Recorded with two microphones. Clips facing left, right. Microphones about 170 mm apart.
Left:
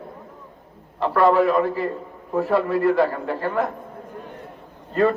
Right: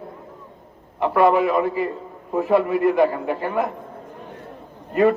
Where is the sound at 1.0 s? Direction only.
15° right (ahead or behind).